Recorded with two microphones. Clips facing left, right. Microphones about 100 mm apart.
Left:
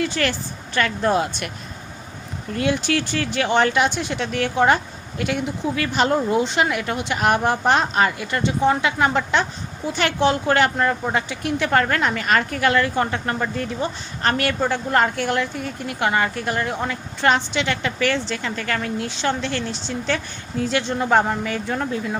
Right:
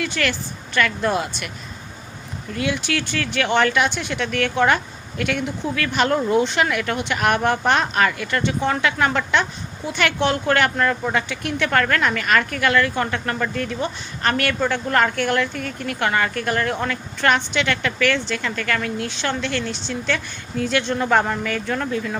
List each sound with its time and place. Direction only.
0.0 s speech: 35° left (ahead or behind)
2.5 s speech: 40° left (ahead or behind); by 22.2 s 20° left (ahead or behind)